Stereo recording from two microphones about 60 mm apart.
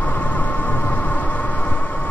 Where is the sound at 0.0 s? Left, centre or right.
Left.